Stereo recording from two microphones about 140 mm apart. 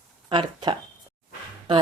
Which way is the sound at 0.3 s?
35° right (ahead or behind).